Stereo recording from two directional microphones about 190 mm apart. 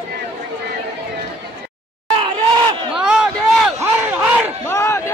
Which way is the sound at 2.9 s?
5° right (ahead or behind).